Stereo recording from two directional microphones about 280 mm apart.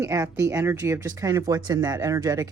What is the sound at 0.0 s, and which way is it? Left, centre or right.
A woman's voice, centre.